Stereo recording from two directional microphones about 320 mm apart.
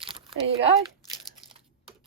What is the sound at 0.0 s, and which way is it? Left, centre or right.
Crumpling, centre.